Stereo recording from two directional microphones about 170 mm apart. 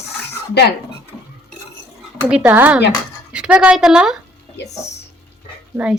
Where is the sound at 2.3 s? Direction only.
10° right (ahead or behind).